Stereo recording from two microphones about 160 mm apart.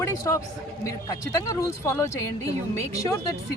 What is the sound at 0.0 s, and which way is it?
Speech, 20° left (ahead or behind).